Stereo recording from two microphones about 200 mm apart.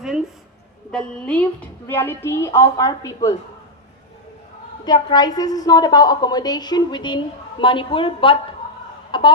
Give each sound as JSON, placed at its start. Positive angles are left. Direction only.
{"t": 0.9, "sound": "a woman's voice", "side_deg": 5}
{"t": 4.9, "sound": "a woman's voice", "side_deg": 20}
{"t": 9.1, "sound": "chicken", "side_deg": 25}